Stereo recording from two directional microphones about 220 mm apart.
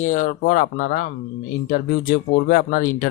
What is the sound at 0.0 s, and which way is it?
Speech, 35° left (ahead or behind).